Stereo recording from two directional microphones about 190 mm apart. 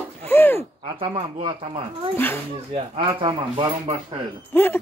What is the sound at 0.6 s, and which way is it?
Speech, 25° right (ahead or behind).